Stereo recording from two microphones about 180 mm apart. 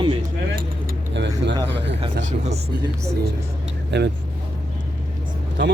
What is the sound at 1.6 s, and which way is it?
Speech, 80° right.